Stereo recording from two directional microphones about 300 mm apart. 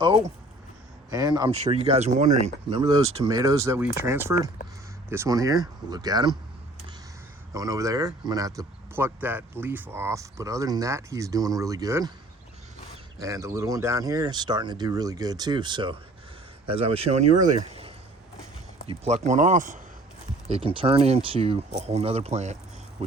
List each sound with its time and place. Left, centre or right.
1.1 s speech: centre
7.5 s speech: centre
13.1 s speech: centre
23.0 s vehicle: right